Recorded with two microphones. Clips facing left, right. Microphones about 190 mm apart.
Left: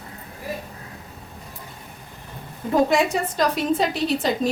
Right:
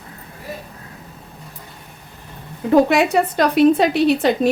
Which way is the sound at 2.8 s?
65° right (ahead or behind).